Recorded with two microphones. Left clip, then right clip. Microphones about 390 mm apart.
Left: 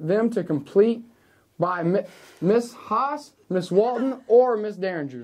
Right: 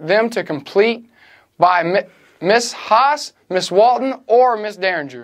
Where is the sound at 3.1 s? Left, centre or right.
Right.